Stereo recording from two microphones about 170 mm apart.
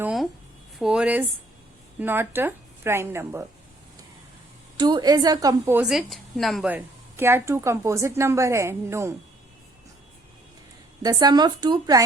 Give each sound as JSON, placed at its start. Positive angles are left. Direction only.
{"t": 0.0, "sound": "a sound", "side_deg": -5}
{"t": 0.8, "sound": "speech", "side_deg": -5}
{"t": 4.8, "sound": "speech", "side_deg": -25}
{"t": 5.8, "sound": "speech", "side_deg": 0}
{"t": 6.7, "sound": "speech", "side_deg": -10}
{"t": 11.0, "sound": "speech", "side_deg": -25}